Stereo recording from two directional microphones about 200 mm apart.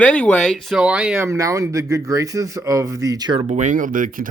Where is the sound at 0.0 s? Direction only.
5° left (ahead or behind); by 3.4 s 20° right (ahead or behind).